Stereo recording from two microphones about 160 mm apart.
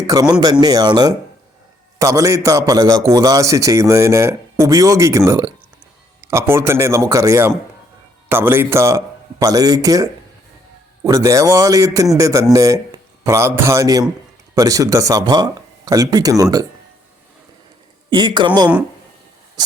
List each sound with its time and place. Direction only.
0.1 s a man's voice: 25° right (ahead or behind)
18.1 s a man's voice: 30° right (ahead or behind)
19.6 s a sound: 25° right (ahead or behind)